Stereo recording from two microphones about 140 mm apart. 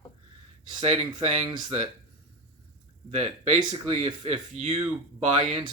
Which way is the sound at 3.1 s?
45° right (ahead or behind).